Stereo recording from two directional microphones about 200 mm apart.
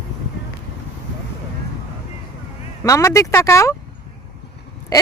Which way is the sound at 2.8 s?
15° left (ahead or behind).